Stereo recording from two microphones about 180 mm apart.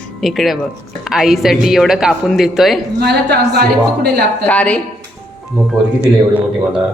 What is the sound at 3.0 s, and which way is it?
A woman's voice, 65° right (ahead or behind).